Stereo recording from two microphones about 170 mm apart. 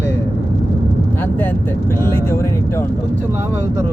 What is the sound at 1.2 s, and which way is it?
Speech, 10° left (ahead or behind).